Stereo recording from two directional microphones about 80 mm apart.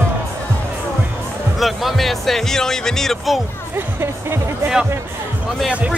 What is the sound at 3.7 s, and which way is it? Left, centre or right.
Speech, right.